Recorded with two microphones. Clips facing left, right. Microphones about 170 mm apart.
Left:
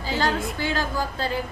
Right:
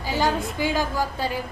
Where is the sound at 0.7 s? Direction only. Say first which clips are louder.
Right 2 dB; 15° right (ahead or behind).